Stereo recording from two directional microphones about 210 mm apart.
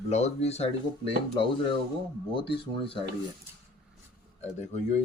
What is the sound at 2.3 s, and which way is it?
Speech, 25° left (ahead or behind).